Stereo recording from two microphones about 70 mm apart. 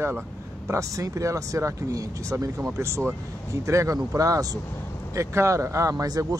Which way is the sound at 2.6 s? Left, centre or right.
Right.